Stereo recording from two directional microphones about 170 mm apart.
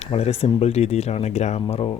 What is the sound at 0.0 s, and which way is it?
Speech, 35° left (ahead or behind).